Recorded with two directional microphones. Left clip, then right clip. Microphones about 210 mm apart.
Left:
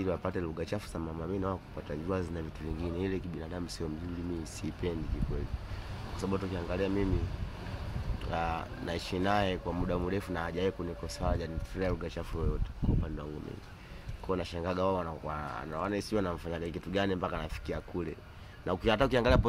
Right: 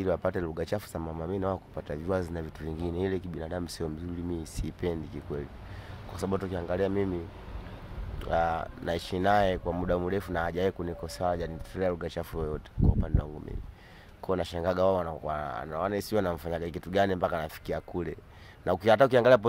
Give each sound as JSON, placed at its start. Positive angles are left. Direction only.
{"t": 0.0, "sound": "speech", "side_deg": -50}
{"t": 6.1, "sound": "speech", "side_deg": -50}
{"t": 8.3, "sound": "speech", "side_deg": -50}
{"t": 14.2, "sound": "speech", "side_deg": -50}